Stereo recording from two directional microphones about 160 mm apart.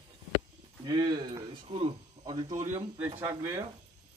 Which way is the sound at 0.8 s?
25° right (ahead or behind).